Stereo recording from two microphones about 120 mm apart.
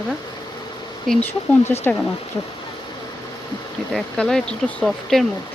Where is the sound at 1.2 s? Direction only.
20° left (ahead or behind).